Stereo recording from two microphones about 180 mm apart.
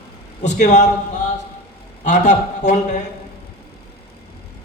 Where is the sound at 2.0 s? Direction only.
40° left (ahead or behind).